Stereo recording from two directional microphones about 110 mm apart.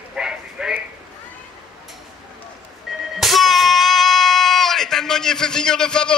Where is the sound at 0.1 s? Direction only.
5° right (ahead or behind).